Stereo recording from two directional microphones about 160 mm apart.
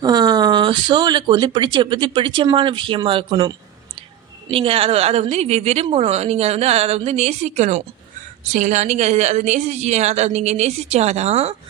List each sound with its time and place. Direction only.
0.0 s speech: 25° right (ahead or behind)
4.5 s a woman's voice: 35° right (ahead or behind)